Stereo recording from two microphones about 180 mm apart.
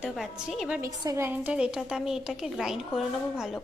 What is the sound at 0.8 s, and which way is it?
A woman's voice, 20° right (ahead or behind).